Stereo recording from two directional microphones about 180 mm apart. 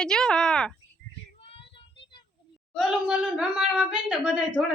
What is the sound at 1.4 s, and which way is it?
Child singing, 30° left (ahead or behind).